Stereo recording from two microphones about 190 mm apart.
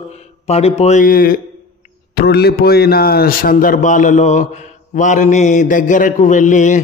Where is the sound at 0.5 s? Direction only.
35° left (ahead or behind).